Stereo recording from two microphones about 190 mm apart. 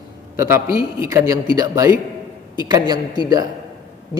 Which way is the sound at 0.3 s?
15° right (ahead or behind).